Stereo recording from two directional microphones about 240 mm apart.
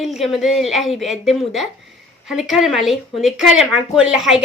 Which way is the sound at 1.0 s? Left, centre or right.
Centre.